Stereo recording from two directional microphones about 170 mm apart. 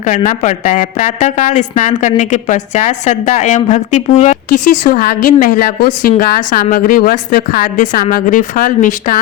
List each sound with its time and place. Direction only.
0.0 s a woman's voice: 50° left (ahead or behind)